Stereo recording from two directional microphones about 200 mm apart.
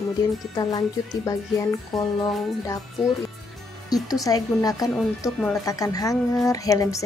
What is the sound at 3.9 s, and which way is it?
Speech, 20° left (ahead or behind).